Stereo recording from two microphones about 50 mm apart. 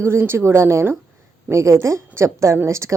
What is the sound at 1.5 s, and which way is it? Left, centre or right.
A woman's voice, right.